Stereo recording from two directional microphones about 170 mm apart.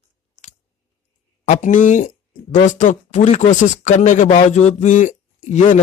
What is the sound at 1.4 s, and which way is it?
Speech, 45° left (ahead or behind).